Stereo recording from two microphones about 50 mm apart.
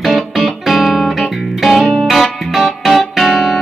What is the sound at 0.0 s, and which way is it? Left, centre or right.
Music, centre.